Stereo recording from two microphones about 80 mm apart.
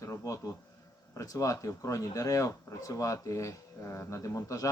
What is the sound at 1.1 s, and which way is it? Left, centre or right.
Speech, left.